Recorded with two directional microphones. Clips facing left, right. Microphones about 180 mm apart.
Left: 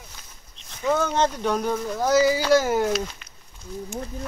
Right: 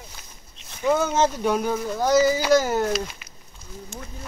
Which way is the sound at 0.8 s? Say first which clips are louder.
Right 1 dB; 10° right (ahead or behind).